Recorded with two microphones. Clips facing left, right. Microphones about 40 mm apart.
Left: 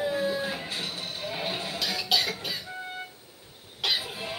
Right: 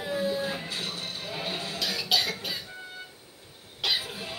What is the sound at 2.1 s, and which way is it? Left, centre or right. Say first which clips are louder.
Cough: even; centre.